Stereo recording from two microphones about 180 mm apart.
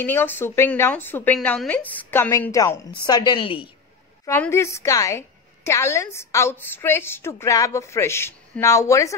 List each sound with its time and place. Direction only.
0.0 s a woman's voice: 10° left (ahead or behind); by 3.6 s 30° left (ahead or behind)
4.3 s a woman's voice: 15° left (ahead or behind)